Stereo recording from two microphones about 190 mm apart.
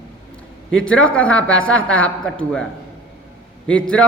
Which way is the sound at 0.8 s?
5° left (ahead or behind).